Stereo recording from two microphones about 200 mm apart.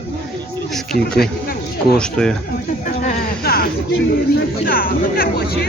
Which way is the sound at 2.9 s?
45° left (ahead or behind).